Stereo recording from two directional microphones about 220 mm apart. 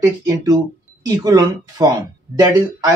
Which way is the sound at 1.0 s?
15° right (ahead or behind).